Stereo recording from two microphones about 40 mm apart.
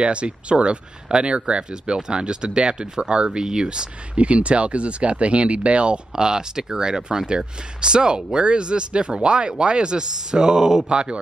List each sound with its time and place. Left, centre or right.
0.0 s speech: right